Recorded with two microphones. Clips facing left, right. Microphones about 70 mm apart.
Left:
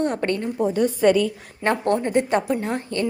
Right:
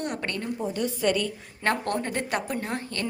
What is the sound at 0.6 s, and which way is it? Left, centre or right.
Speech, left.